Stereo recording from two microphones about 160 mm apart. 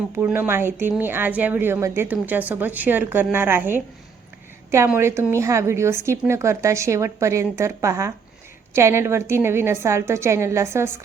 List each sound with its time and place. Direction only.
0.2 s a woman's voice: 15° right (ahead or behind)
4.9 s a woman's voice: 15° right (ahead or behind)